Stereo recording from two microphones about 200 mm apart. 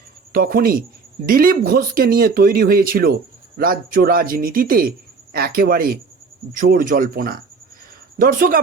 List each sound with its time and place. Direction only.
0.3 s a man's voice: 45° right (ahead or behind)